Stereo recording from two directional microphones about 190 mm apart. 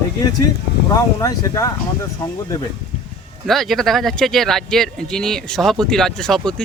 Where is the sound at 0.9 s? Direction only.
15° left (ahead or behind).